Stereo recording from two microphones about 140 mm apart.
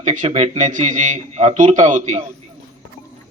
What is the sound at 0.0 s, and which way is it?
A man's voice, 60° right (ahead or behind).